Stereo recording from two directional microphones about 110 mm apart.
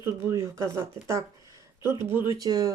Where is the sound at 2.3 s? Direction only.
35° right (ahead or behind).